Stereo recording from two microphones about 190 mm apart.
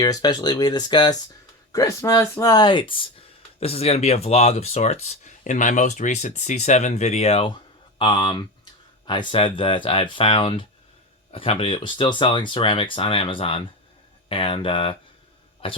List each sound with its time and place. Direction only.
0.0 s speech: 20° left (ahead or behind)